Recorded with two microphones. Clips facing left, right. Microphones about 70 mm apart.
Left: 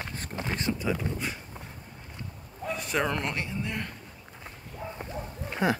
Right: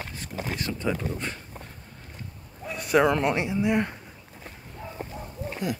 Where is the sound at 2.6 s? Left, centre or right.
Centre.